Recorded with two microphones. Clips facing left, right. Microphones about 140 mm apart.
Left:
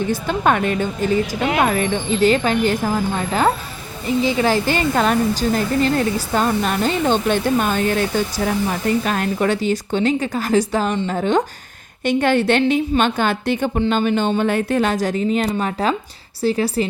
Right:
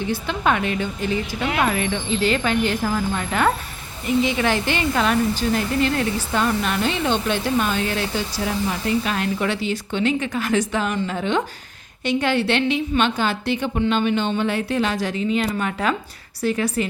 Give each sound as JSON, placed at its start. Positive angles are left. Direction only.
{"t": 0.1, "sound": "a woman's voice", "side_deg": 45}
{"t": 13.7, "sound": "speech", "side_deg": 35}